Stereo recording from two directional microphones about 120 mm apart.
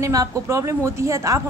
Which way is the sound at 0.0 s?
25° right (ahead or behind).